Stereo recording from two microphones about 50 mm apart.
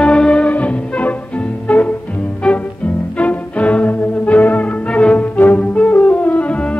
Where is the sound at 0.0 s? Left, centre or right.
Centre.